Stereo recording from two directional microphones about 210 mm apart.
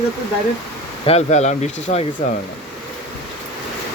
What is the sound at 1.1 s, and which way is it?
Speech, 30° left (ahead or behind).